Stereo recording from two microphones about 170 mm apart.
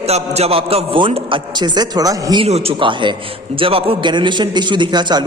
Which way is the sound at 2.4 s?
35° right (ahead or behind).